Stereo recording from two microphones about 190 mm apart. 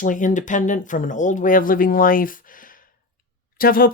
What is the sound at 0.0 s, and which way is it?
Speech, 40° left (ahead or behind).